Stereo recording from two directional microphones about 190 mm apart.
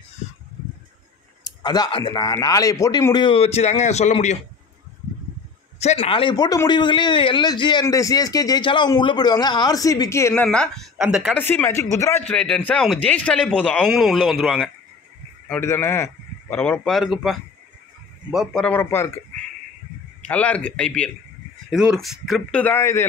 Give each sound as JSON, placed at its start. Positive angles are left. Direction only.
{"t": 1.4, "sound": "speech", "side_deg": 20}
{"t": 5.8, "sound": "a man's voice", "side_deg": 30}
{"t": 20.2, "sound": "speech", "side_deg": 5}